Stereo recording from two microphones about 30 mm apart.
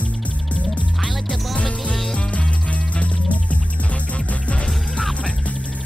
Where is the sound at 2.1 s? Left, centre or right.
Left.